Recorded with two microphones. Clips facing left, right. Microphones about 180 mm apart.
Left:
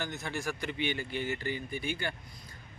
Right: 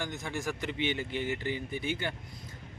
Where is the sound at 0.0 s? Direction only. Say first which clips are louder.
Right 1 dB; 15° right (ahead or behind).